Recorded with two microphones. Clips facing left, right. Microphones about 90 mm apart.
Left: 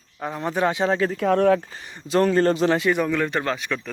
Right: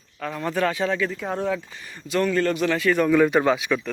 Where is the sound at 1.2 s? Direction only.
65° left (ahead or behind).